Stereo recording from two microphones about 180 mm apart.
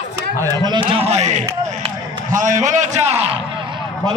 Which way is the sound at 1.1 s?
40° right (ahead or behind).